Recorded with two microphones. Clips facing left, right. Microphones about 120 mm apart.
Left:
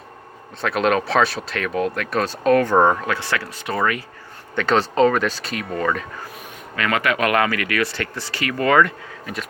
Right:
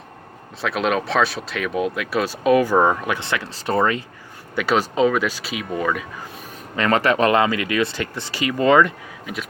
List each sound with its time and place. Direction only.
0.6 s speech: centre (ahead or behind)
3.0 s speech: 20° right (ahead or behind)
4.5 s speech: 10° right (ahead or behind)
6.7 s speech: 35° right (ahead or behind)
9.2 s speech: centre (ahead or behind)